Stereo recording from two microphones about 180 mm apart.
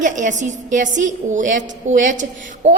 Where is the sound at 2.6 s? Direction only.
40° right (ahead or behind).